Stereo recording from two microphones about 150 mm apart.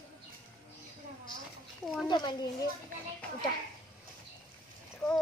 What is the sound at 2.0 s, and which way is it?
Speech, 30° left (ahead or behind).